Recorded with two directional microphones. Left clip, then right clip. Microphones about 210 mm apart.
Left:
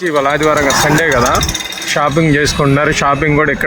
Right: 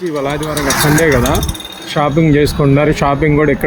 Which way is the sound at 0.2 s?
30° left (ahead or behind).